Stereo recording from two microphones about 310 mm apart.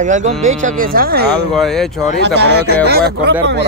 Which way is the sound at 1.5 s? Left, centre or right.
Centre.